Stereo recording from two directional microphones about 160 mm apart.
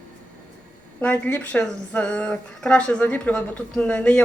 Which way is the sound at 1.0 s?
5° left (ahead or behind).